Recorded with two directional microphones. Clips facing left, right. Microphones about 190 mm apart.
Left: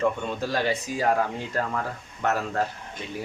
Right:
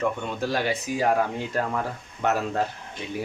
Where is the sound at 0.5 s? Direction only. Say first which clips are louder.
Even; 15° right (ahead or behind).